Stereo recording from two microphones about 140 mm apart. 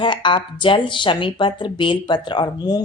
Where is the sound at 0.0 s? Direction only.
35° left (ahead or behind).